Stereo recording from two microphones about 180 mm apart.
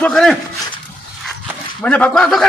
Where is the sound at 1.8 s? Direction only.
5° left (ahead or behind).